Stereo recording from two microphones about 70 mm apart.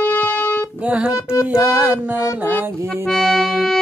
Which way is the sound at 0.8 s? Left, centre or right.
Right.